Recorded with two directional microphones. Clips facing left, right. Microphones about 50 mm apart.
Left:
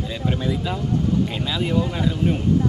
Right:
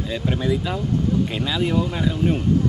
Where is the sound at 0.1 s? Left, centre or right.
Centre.